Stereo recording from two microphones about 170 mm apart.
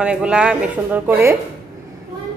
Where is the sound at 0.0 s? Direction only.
5° right (ahead or behind).